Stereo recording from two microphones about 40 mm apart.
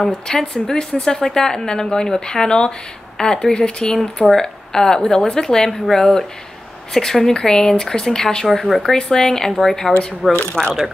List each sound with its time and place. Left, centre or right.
0.0 s speech: centre
8.5 s speech: centre
8.8 s speech: centre
10.6 s speech: centre